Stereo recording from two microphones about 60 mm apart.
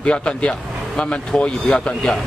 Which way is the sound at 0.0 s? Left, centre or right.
Centre.